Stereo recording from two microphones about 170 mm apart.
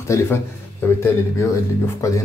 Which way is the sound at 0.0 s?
15° left (ahead or behind).